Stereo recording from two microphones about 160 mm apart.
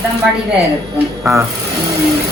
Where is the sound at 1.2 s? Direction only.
15° right (ahead or behind).